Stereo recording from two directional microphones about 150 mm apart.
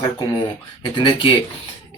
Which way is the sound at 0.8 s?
35° left (ahead or behind).